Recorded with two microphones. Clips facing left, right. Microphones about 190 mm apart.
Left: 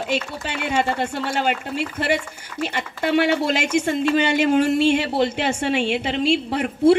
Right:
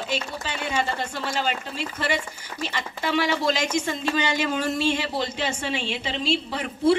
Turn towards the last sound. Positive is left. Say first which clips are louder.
# left 5 dB
turn(degrees=60)  # may be behind; listen again after turning